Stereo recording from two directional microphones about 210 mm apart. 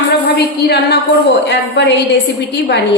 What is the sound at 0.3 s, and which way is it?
A man's voice, 50° left (ahead or behind).